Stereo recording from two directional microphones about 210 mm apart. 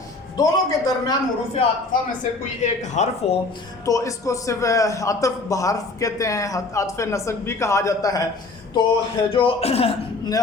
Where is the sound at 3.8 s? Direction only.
15° left (ahead or behind).